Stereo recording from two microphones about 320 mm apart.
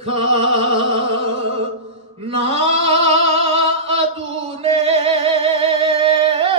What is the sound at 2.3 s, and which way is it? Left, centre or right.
Bleat, centre.